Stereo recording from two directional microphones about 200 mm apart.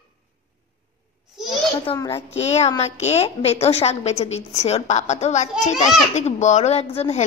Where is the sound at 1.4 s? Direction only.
Centre (ahead or behind).